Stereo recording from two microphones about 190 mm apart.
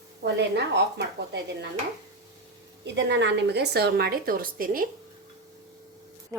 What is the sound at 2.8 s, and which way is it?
A woman's voice, 65° right (ahead or behind).